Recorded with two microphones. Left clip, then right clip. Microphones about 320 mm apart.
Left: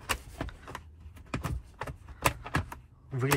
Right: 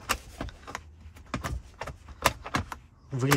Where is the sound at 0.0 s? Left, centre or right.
Centre.